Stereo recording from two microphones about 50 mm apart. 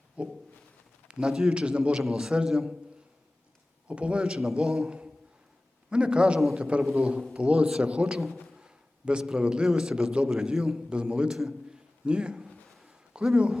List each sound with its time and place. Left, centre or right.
0.2 s a man's voice: right
2.0 s a man's voice: centre
3.8 s a man's voice: right
6.8 s a man's voice: centre
7.3 s a man's voice: right
8.5 s a sound: centre
9.6 s a man's voice: centre
11.3 s a sound: centre
12.0 s a man's voice: centre
12.5 s a sound: centre
13.2 s a man's voice: centre